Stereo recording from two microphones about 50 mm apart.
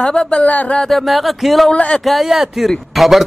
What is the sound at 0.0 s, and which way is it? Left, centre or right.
Speech, centre.